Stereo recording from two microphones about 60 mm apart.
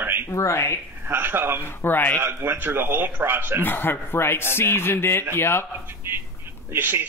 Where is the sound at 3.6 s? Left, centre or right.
Left.